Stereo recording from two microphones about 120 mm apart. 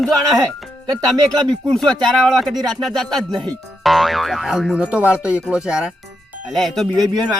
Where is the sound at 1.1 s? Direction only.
35° right (ahead or behind).